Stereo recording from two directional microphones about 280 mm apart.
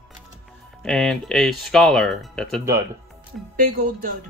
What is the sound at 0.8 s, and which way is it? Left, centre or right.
Speech, centre.